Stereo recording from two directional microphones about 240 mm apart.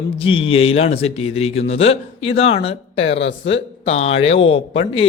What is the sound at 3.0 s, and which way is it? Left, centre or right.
Speech, left.